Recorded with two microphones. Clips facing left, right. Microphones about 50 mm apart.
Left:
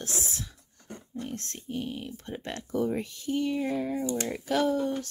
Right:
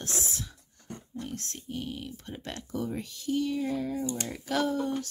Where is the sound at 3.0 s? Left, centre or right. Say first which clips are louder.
Even; centre.